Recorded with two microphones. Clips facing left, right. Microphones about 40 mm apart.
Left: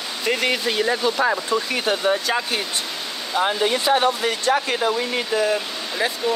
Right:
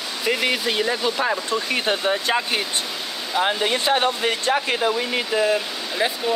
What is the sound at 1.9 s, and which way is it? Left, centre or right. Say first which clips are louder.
Speech: left 1 dB; right.